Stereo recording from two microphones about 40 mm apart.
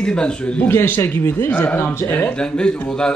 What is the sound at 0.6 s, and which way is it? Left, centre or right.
Speech, left.